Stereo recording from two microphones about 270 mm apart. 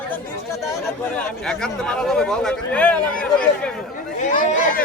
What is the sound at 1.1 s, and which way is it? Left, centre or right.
Speech, centre.